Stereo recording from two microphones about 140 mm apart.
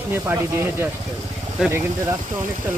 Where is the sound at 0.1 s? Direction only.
15° right (ahead or behind).